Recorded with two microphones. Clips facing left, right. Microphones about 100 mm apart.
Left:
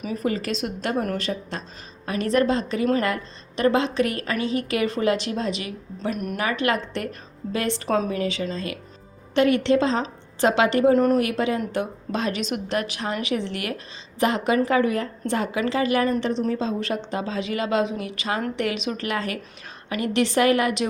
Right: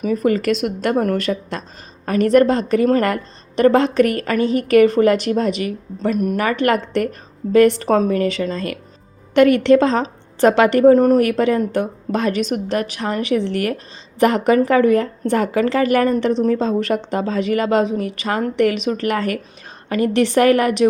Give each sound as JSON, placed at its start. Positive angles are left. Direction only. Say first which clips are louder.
{"t": 0.0, "sound": "a woman's voice", "louder": "right 9 dB", "side_deg": -55}
{"t": 1.3, "sound": "speech", "louder": "right 6 dB", "side_deg": -65}
{"t": 2.0, "sound": "a woman's voice", "louder": "right 8 dB", "side_deg": -50}